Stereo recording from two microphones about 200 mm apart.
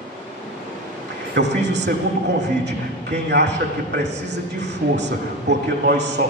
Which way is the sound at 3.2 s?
60° right (ahead or behind).